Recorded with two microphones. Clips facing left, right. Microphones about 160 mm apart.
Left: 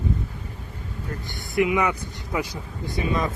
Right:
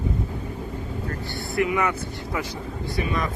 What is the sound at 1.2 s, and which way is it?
Speech, 15° left (ahead or behind).